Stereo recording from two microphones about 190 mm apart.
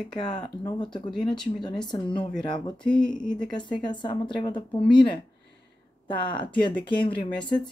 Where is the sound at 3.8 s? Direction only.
25° left (ahead or behind).